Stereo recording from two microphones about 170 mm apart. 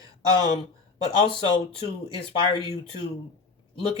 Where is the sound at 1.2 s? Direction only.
30° left (ahead or behind).